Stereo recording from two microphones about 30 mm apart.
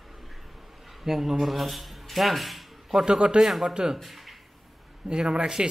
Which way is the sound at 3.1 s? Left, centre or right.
Right.